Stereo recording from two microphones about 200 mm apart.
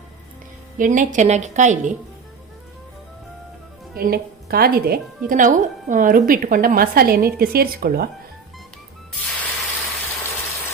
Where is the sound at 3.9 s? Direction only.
50° right (ahead or behind).